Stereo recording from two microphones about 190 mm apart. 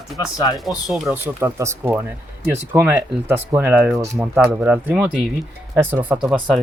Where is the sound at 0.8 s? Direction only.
5° right (ahead or behind).